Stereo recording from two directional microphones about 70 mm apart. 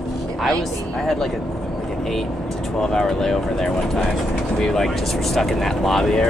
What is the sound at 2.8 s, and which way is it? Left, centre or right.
Speech, centre.